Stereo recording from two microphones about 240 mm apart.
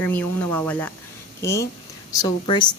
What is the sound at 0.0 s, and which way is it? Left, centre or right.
A woman's voice, centre.